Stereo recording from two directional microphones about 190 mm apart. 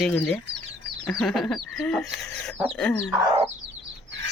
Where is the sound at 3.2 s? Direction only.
30° right (ahead or behind).